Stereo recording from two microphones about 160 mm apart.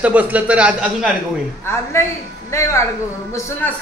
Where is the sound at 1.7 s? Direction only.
15° left (ahead or behind).